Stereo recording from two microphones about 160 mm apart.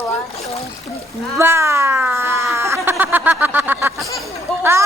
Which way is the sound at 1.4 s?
15° right (ahead or behind).